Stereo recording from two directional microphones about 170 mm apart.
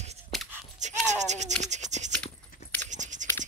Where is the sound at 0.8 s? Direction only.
45° right (ahead or behind).